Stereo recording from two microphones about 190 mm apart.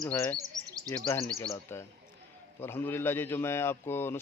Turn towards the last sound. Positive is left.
turn(degrees=10)  # may be behind; listen again after turning